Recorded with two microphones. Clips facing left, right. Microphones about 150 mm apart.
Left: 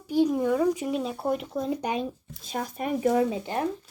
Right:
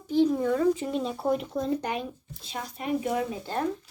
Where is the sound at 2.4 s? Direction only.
50° left (ahead or behind).